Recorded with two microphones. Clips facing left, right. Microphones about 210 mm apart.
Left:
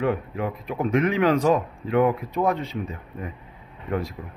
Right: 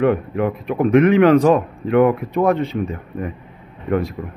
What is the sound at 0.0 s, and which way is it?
Speech, 65° right (ahead or behind).